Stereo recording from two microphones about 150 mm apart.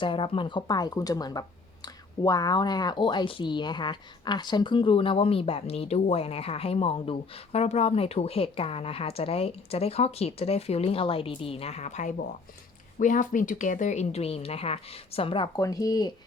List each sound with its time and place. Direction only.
0.0 s speech: 35° left (ahead or behind)
15.5 s speech: 25° left (ahead or behind)